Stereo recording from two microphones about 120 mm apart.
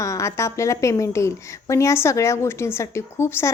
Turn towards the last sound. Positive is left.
turn(degrees=20)  # may be behind; listen again after turning